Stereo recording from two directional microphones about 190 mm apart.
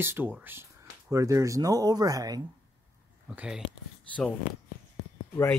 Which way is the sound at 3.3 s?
5° right (ahead or behind).